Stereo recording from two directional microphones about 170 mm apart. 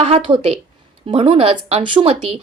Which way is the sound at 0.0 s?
35° right (ahead or behind).